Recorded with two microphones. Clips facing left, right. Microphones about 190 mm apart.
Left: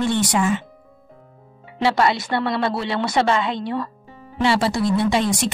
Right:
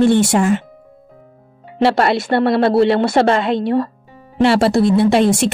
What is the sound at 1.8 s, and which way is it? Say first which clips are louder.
A woman's voice: right 5 dB; 60° right (ahead or behind).